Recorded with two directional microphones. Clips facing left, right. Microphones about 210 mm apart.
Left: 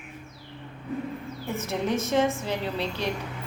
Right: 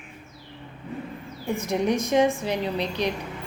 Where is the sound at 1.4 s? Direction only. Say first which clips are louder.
Right 5 dB; 15° right (ahead or behind).